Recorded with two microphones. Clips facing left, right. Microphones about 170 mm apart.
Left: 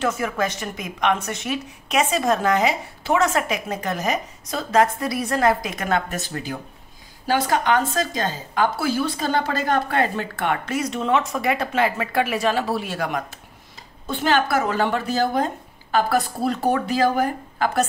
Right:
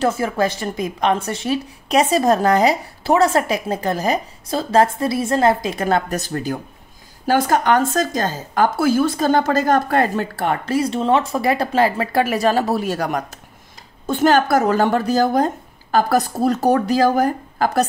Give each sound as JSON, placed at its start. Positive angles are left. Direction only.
{"t": 0.0, "sound": "a woman's voice", "side_deg": -30}